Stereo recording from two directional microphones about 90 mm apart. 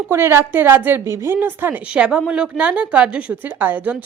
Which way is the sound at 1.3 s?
20° right (ahead or behind).